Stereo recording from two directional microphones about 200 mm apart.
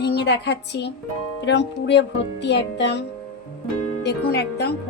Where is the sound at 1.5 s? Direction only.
60° left (ahead or behind).